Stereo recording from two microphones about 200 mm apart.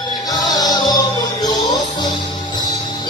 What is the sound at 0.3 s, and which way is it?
Music, 20° left (ahead or behind).